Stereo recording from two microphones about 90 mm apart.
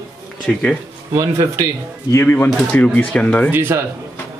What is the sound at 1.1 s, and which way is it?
Speech, 40° right (ahead or behind).